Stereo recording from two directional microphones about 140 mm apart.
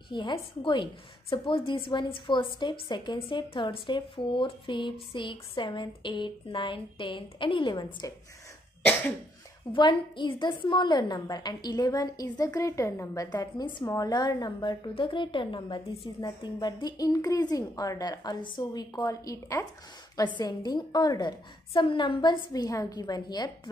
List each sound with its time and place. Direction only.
0.1 s a woman's voice: 35° left (ahead or behind)
9.7 s a woman's voice: 35° left (ahead or behind)